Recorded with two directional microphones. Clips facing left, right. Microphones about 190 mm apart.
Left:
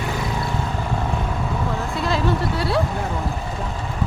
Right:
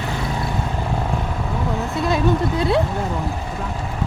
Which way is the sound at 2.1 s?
20° right (ahead or behind).